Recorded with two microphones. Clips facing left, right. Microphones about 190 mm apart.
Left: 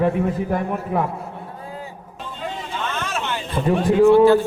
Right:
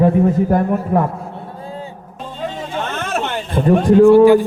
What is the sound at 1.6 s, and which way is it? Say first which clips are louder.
Music: right 5 dB; 30° right (ahead or behind).